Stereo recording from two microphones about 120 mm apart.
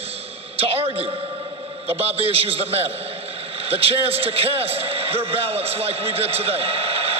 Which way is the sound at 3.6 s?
55° right (ahead or behind).